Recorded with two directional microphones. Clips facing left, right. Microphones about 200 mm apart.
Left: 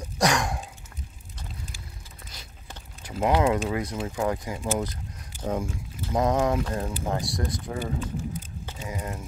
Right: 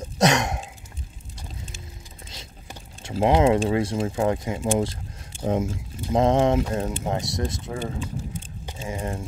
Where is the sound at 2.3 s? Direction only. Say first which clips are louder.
Right 4 dB; 25° right (ahead or behind).